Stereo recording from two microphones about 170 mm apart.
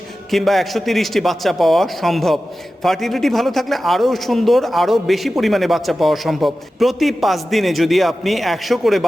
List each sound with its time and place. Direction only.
0.3 s a man's voice: centre (ahead or behind)